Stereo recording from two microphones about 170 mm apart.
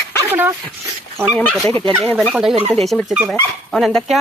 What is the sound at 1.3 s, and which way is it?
Speech, 5° left (ahead or behind).